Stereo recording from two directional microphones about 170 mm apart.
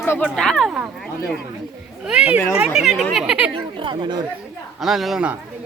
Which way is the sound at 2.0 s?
5° right (ahead or behind).